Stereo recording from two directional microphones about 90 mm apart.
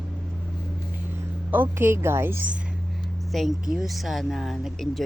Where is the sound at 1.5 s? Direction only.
20° right (ahead or behind).